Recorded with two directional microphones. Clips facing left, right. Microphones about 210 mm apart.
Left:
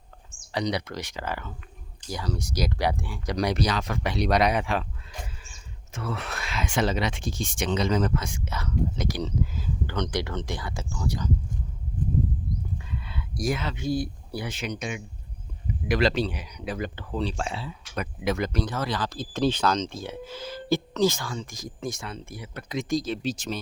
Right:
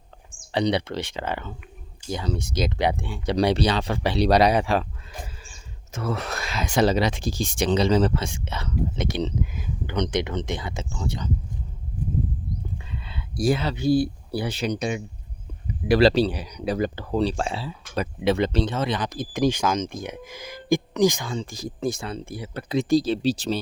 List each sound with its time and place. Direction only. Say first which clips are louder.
0.5 s speech: right 5 dB; 30° right (ahead or behind)
12.9 s speech: left 1 dB; 25° right (ahead or behind)